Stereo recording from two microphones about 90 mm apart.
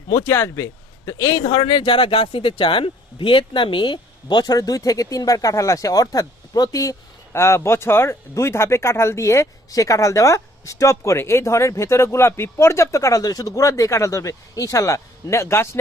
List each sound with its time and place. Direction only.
0.3 s speech: 30° left (ahead or behind)
1.5 s speech: 70° left (ahead or behind); by 6.9 s 40° left (ahead or behind)
7.3 s speech: 30° left (ahead or behind)